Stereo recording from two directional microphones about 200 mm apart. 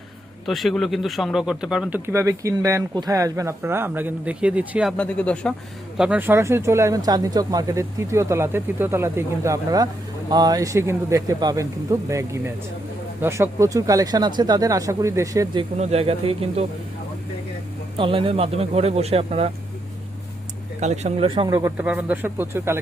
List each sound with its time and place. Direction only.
0.4 s speech: centre (ahead or behind)
4.9 s speech: 5° left (ahead or behind)
6.0 s speech: 10° right (ahead or behind)
15.8 s speech: 30° right (ahead or behind)
17.9 s speech: 25° right (ahead or behind)
20.8 s speech: 35° right (ahead or behind); by 22.8 s 10° right (ahead or behind)